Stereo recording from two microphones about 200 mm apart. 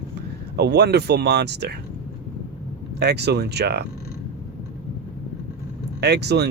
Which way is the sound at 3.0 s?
55° right (ahead or behind).